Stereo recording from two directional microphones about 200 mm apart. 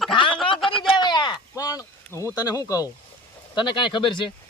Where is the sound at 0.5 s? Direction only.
Centre (ahead or behind).